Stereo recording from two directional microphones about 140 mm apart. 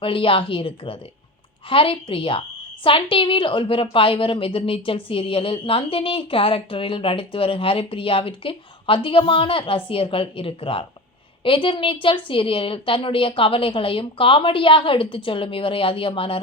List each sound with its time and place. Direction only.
0.0 s a woman's voice: 40° left (ahead or behind)